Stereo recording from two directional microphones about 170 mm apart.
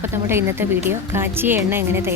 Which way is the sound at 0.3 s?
15° right (ahead or behind).